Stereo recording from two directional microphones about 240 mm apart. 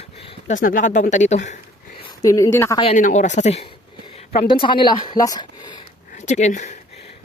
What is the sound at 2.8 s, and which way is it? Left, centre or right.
Speech, left.